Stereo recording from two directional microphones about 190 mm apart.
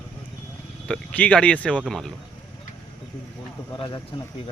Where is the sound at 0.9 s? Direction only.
5° left (ahead or behind).